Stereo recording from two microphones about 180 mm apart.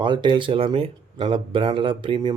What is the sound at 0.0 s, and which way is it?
Speech, 25° right (ahead or behind).